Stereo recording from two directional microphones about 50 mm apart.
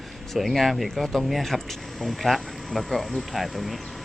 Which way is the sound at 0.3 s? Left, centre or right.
Centre.